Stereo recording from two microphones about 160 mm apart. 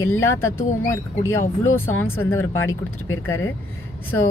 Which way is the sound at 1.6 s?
15° left (ahead or behind).